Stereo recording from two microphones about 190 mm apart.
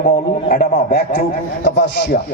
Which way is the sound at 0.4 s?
55° left (ahead or behind).